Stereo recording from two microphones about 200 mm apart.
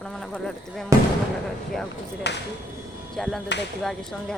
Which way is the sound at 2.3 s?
60° left (ahead or behind).